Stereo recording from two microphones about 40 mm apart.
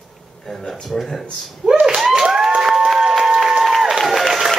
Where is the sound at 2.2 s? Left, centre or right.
Centre.